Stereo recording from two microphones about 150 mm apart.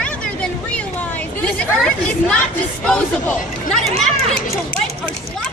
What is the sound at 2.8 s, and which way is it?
Speech, 5° left (ahead or behind).